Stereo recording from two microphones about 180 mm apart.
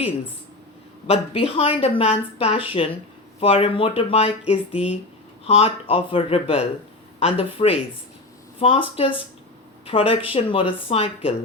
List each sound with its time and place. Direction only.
1.0 s a woman's voice: 35° left (ahead or behind)